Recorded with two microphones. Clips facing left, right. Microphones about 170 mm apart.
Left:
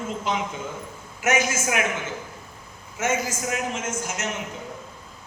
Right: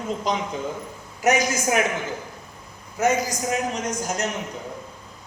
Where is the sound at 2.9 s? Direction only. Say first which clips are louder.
Right 4 dB; 35° right (ahead or behind).